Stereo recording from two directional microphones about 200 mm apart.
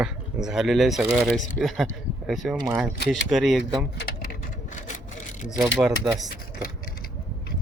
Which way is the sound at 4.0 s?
45° left (ahead or behind).